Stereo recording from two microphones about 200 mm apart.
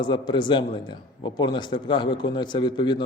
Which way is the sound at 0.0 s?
25° left (ahead or behind).